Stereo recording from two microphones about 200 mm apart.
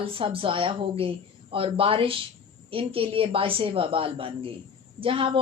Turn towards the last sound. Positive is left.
turn(degrees=-25)  # may be behind; listen again after turning